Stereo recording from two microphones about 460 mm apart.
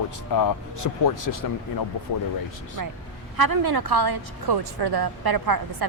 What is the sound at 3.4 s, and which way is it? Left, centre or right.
A woman's voice, right.